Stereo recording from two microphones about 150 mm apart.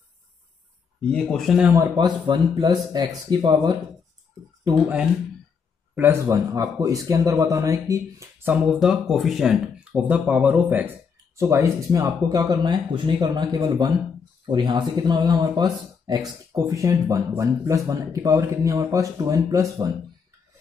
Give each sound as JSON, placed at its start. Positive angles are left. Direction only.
{"t": 1.1, "sound": "speech", "side_deg": 5}
{"t": 1.6, "sound": "speech", "side_deg": -20}
{"t": 5.9, "sound": "speech", "side_deg": -15}
{"t": 8.7, "sound": "speech", "side_deg": -5}